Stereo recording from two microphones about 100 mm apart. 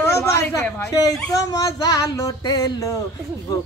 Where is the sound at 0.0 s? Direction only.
25° left (ahead or behind).